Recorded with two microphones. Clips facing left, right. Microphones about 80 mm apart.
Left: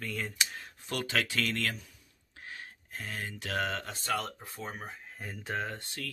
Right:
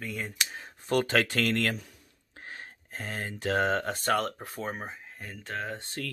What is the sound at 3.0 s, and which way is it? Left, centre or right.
Speech, right.